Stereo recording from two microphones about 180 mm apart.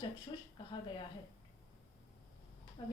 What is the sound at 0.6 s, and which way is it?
Speech, 25° left (ahead or behind).